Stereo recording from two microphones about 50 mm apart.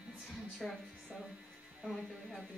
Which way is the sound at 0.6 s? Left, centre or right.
Centre.